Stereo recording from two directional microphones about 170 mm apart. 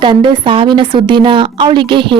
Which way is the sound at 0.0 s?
25° right (ahead or behind).